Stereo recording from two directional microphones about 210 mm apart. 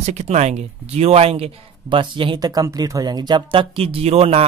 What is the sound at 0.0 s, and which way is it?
Speech, 30° right (ahead or behind).